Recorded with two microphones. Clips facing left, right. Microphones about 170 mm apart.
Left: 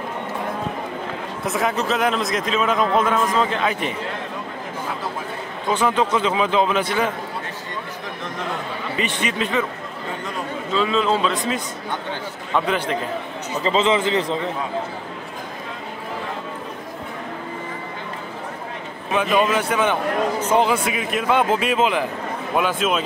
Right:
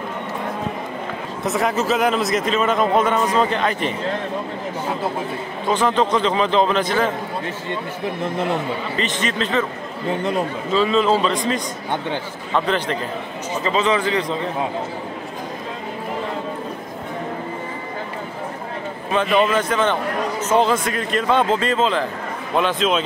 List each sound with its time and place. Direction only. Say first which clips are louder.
1.4 s a man's voice: right 2 dB; centre (ahead or behind)
5.7 s a man's voice: right 1 dB; 10° left (ahead or behind)
8.9 s a man's voice: left 2 dB; 10° left (ahead or behind)
10.7 s a man's voice: right 3 dB; centre (ahead or behind)
13.7 s a man's voice: left 1 dB; 25° left (ahead or behind)
19.1 s a man's voice: right 1 dB; 10° left (ahead or behind)